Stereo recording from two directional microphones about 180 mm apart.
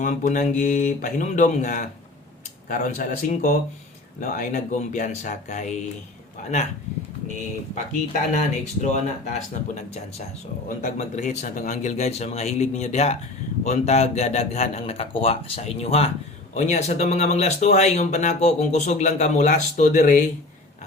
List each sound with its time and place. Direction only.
0.0 s speech: 45° left (ahead or behind)
8.1 s speech: 40° left (ahead or behind)